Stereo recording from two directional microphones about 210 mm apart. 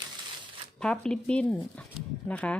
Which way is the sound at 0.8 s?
5° left (ahead or behind).